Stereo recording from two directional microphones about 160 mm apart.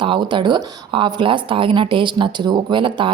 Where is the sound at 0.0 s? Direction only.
30° right (ahead or behind).